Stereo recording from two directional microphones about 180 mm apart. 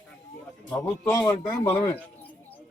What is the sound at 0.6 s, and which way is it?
A man's voice, 15° left (ahead or behind).